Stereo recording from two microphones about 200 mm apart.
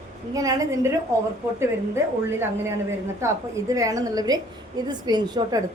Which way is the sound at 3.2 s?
15° right (ahead or behind).